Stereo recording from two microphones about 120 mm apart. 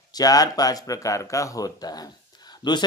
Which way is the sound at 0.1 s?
30° left (ahead or behind).